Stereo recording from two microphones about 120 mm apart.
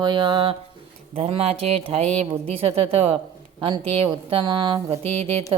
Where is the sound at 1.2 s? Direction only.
60° right (ahead or behind).